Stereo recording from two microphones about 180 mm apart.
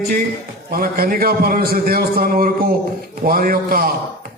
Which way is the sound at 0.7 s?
55° right (ahead or behind).